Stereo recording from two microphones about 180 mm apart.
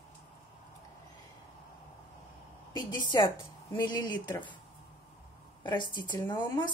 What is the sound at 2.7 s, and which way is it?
Speech, 25° left (ahead or behind).